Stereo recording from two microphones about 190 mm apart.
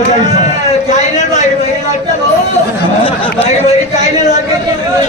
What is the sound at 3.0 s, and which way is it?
A man's voice, 35° left (ahead or behind).